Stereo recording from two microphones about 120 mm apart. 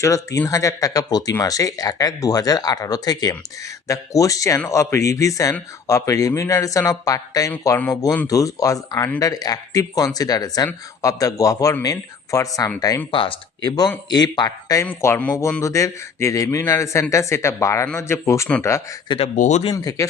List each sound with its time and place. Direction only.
0.0 s speech: 25° left (ahead or behind)
13.1 s speech: 45° left (ahead or behind)
14.8 s speech: 15° left (ahead or behind)
19.0 s speech: 45° left (ahead or behind)
19.4 s speech: 75° left (ahead or behind)
19.7 s speech: 30° left (ahead or behind)